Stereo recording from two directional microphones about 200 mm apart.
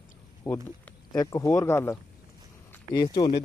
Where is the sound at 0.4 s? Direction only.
15° left (ahead or behind).